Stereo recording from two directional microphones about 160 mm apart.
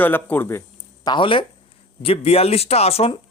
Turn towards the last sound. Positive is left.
turn(degrees=40)  # may be behind; listen again after turning